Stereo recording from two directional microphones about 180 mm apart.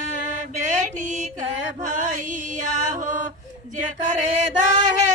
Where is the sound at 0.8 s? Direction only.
45° right (ahead or behind).